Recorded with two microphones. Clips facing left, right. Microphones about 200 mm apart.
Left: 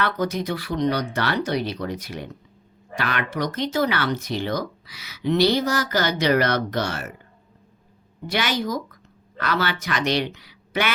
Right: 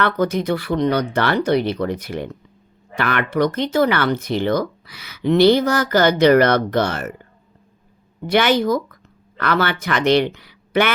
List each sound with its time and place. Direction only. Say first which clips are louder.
0.0 s speech: right 5 dB; 55° right (ahead or behind)
8.3 s speech: right 8 dB; 55° right (ahead or behind)